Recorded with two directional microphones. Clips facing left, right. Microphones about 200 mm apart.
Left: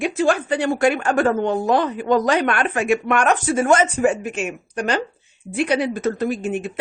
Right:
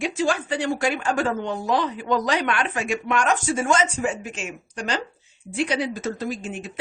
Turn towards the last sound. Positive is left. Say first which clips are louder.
# left 7 dB
turn(degrees=60)  # may be behind; listen again after turning